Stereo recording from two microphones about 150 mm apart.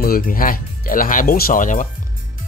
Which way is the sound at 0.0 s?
75° left (ahead or behind).